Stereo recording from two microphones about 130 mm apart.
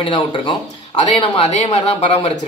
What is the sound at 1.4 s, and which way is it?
Speech, 60° left (ahead or behind).